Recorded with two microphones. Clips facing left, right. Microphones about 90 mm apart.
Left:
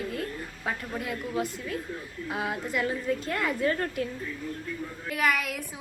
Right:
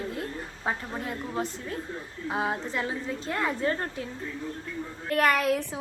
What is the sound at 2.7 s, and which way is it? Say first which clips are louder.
A woman's voice: left 3 dB; 25° right (ahead or behind).